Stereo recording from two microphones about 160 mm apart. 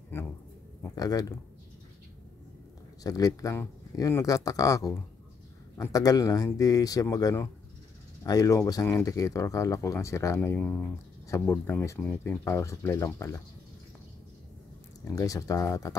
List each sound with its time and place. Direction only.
0.8 s speech: 20° left (ahead or behind)
3.0 s speech: 20° left (ahead or behind)
15.0 s speech: 20° left (ahead or behind)